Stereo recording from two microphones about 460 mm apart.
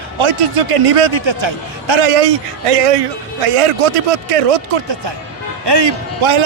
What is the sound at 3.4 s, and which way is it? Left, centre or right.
Speech, right.